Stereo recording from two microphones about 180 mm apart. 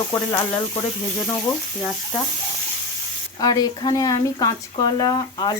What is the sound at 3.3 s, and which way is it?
Speech, 20° left (ahead or behind).